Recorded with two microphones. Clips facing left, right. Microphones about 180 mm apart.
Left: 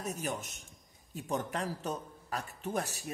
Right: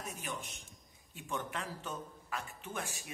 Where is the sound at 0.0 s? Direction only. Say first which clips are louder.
Left 6 dB; 40° left (ahead or behind).